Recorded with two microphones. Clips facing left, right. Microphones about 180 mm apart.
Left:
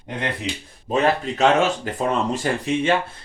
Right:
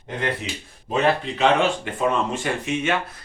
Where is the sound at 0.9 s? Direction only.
40° left (ahead or behind).